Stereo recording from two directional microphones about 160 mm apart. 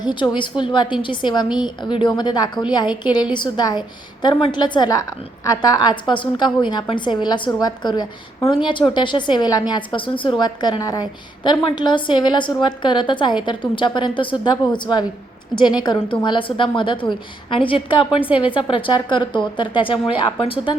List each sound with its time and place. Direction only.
0.0 s a woman's voice: 30° left (ahead or behind)